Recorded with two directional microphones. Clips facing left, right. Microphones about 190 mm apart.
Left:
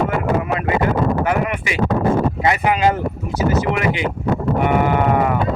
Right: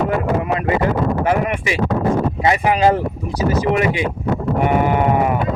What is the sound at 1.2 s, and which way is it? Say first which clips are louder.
Speech: right 2 dB; 30° right (ahead or behind).